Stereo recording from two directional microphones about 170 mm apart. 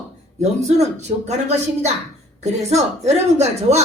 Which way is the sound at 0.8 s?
40° right (ahead or behind).